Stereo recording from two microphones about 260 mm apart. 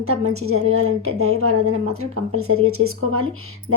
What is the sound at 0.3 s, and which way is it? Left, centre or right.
A woman's voice, right.